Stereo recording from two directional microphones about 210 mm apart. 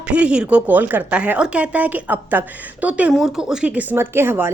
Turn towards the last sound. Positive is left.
turn(degrees=-10)  # may be behind; listen again after turning